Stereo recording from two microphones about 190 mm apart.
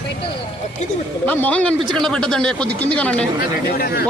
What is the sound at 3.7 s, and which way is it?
Speech, 55° left (ahead or behind).